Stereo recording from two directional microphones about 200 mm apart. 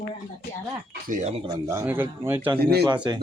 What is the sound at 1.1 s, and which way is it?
Speech, 35° right (ahead or behind).